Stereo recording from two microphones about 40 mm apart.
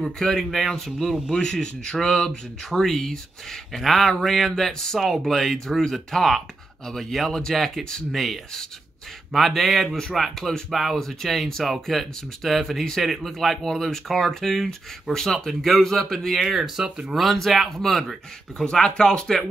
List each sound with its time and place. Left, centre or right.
0.2 s speech: centre
1.3 s speech: left
2.0 s speech: centre
16.3 s speech: centre
18.6 s speech: centre